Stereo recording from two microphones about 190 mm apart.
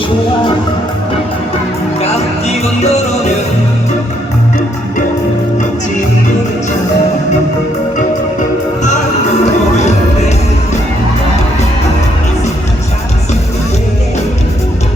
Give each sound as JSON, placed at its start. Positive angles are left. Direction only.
{"t": 9.4, "sound": "music", "side_deg": 35}